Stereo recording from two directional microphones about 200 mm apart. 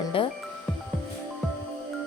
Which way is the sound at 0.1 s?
25° left (ahead or behind).